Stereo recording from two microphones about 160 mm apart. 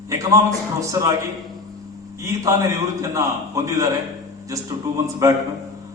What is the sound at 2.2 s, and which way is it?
A man's voice, 20° right (ahead or behind).